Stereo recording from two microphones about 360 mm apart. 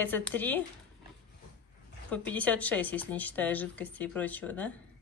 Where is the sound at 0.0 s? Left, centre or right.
Centre.